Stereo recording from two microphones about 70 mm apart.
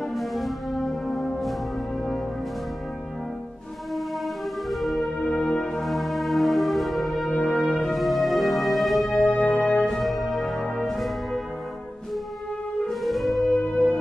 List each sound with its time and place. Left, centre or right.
0.0 s music: centre
4.6 s music: centre
5.3 s music: centre
9.3 s music: centre
12.8 s music: centre